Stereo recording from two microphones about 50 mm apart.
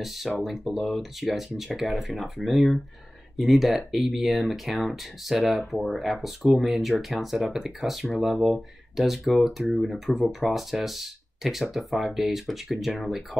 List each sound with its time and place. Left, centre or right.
0.0 s speech: centre